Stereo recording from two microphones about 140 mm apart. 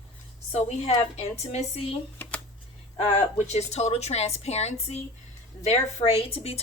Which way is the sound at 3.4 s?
50° left (ahead or behind).